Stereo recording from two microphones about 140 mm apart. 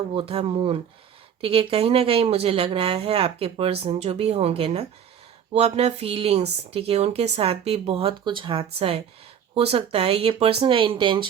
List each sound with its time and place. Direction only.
0.1 s speech: 40° right (ahead or behind)